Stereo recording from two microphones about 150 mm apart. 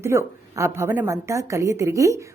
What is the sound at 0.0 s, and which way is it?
A woman's voice, 15° right (ahead or behind).